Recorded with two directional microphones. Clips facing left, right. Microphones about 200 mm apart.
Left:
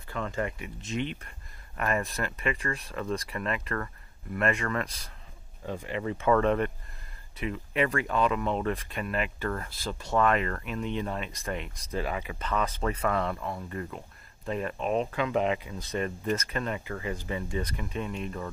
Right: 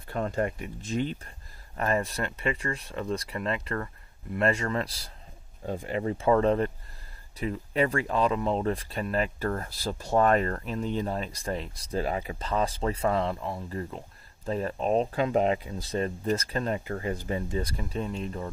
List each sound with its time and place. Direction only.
0.1 s speech: 40° right (ahead or behind)
5.7 s speech: 40° right (ahead or behind)